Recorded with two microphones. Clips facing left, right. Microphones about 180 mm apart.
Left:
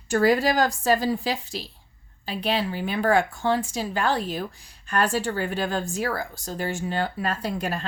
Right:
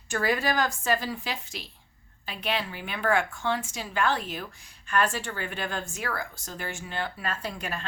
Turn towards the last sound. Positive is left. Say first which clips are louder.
# left 6 dB
turn(degrees=35)  # may be behind; listen again after turning